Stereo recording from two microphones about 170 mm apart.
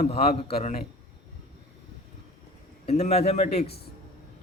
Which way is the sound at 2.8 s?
40° left (ahead or behind).